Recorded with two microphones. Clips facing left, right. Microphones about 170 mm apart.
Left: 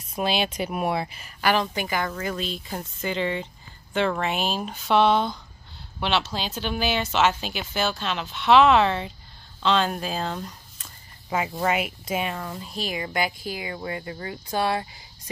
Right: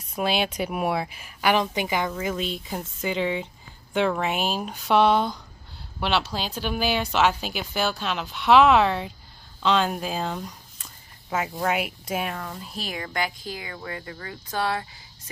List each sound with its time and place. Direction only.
0.2 s speech: 10° right (ahead or behind)
13.0 s speech: 10° left (ahead or behind)